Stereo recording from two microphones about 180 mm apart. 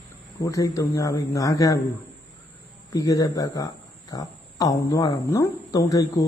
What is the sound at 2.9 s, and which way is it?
Speech, 20° left (ahead or behind).